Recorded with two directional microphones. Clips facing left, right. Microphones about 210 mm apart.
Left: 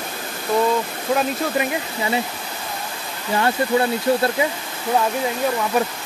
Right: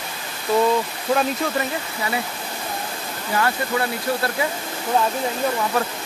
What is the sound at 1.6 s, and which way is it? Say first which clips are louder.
Speech: left 3 dB; 25° left (ahead or behind).